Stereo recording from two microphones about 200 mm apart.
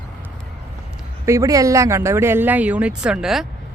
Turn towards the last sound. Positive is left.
turn(degrees=0)  # may be behind; listen again after turning